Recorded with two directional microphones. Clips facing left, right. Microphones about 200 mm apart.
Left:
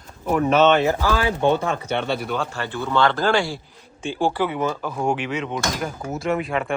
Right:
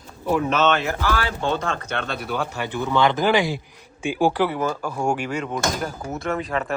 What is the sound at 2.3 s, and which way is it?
Speech, 15° right (ahead or behind).